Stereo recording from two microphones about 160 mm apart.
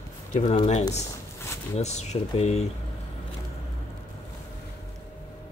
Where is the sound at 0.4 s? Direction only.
40° left (ahead or behind).